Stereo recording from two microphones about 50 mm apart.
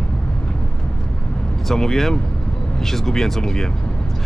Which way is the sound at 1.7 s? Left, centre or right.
Centre.